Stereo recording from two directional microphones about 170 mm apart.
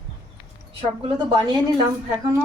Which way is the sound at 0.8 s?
30° right (ahead or behind).